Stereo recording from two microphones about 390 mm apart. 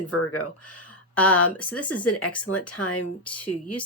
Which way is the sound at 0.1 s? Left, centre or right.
Left.